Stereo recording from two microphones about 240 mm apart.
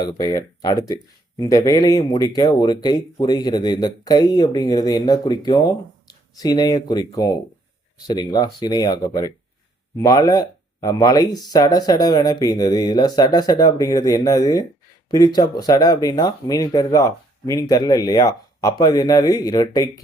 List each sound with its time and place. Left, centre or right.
0.0 s speech: centre